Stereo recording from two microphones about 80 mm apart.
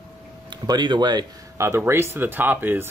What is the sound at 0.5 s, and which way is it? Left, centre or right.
Speech, right.